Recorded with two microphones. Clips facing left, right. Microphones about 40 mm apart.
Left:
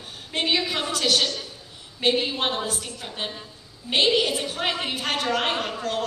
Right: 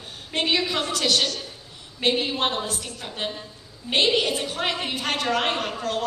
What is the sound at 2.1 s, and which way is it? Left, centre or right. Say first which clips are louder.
Speech: left 1 dB; centre.